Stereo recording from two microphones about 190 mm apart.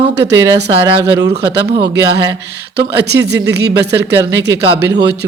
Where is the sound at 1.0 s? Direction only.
60° right (ahead or behind).